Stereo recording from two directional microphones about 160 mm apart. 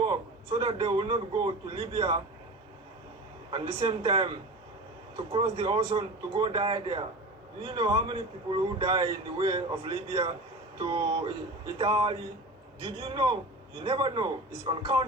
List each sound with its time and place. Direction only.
0.0 s a man's voice: 30° right (ahead or behind)
3.5 s a man's voice: 35° right (ahead or behind)